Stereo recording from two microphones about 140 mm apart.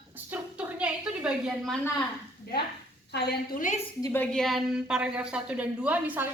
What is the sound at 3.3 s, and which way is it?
Speech, 70° left (ahead or behind).